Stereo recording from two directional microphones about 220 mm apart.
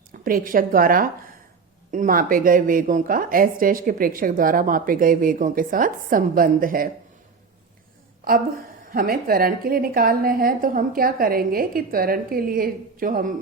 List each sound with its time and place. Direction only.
0.1 s a woman's voice: 40° right (ahead or behind)
8.2 s a woman's voice: 40° right (ahead or behind)